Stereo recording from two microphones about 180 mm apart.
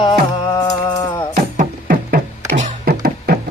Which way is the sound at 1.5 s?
50° right (ahead or behind).